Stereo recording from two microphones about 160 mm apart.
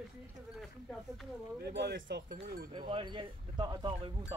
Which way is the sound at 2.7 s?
30° right (ahead or behind).